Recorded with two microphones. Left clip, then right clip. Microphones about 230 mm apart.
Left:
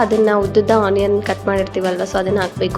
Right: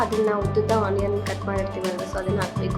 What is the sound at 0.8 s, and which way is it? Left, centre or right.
Speech, left.